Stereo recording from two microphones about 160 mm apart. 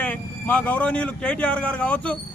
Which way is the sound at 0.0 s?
10° left (ahead or behind).